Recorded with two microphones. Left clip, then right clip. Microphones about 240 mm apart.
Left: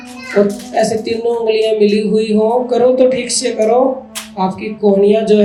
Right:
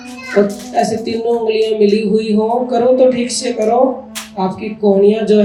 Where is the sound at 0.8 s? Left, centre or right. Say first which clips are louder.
Left 1 dB; left.